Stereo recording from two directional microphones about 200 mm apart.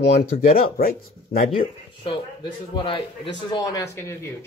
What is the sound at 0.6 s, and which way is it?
Speech, 50° left (ahead or behind).